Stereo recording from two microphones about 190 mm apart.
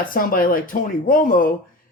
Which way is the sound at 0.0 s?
50° left (ahead or behind).